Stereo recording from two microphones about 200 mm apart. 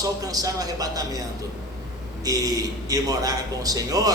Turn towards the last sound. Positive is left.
turn(degrees=-20)  # may be behind; listen again after turning